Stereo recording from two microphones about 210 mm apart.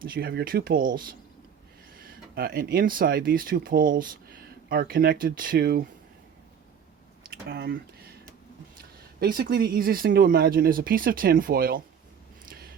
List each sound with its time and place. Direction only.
0.0 s speech: 45° right (ahead or behind)
7.4 s speech: 50° right (ahead or behind)
9.2 s speech: 45° right (ahead or behind)